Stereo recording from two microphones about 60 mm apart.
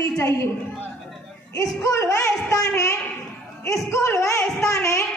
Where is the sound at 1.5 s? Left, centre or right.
Left.